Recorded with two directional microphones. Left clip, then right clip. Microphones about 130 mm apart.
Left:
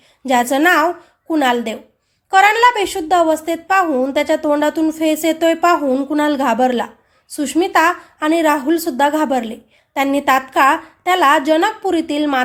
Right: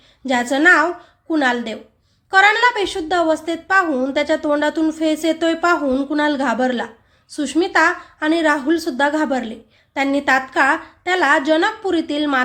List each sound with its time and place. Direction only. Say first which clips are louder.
0.3 s a woman's voice: left 1 dB; 15° left (ahead or behind)